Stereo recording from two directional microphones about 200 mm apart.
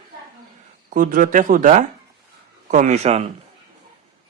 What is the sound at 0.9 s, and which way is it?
Speech, 40° right (ahead or behind).